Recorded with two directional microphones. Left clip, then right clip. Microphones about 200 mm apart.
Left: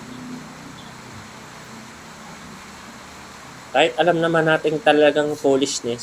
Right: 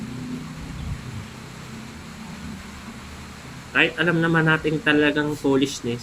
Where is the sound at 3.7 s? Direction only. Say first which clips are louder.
Left 3 dB; 10° right (ahead or behind).